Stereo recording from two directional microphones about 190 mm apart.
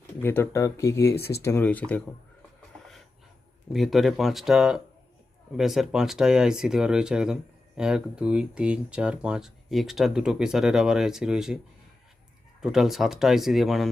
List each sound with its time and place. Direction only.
0.2 s speech: 10° left (ahead or behind)
3.7 s speech: centre (ahead or behind)
12.6 s speech: centre (ahead or behind)